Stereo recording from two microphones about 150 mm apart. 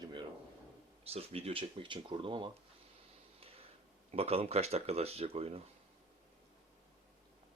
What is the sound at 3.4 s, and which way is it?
Tick-tock, 40° right (ahead or behind).